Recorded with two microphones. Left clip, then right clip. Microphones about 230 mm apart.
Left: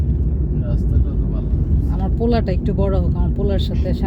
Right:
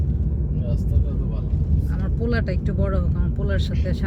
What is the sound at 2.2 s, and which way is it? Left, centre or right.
Speech, centre.